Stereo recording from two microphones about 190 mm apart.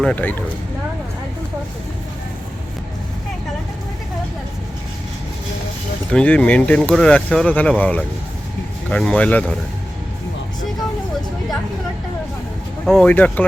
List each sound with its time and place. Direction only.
0.0 s speech: 5° left (ahead or behind)
6.1 s speech: 5° left (ahead or behind)
12.8 s speech: 5° left (ahead or behind)